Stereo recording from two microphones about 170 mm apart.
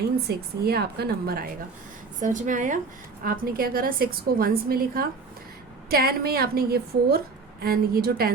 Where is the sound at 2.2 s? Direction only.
50° right (ahead or behind).